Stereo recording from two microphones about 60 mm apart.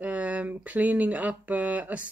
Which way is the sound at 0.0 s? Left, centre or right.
Right.